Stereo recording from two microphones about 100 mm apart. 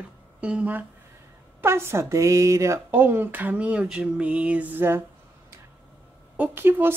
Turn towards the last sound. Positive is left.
turn(degrees=-20)  # may be behind; listen again after turning